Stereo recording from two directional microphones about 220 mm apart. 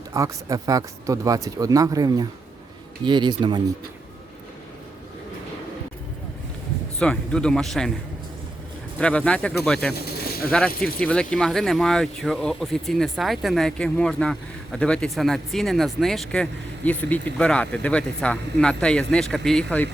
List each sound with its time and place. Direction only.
0.1 s speech: 15° right (ahead or behind)
7.0 s speech: 5° left (ahead or behind)
9.0 s speech: 5° left (ahead or behind)
9.9 s a sound: 45° left (ahead or behind)
10.8 s speech: 5° left (ahead or behind)